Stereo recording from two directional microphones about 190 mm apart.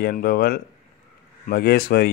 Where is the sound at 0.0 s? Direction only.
55° left (ahead or behind).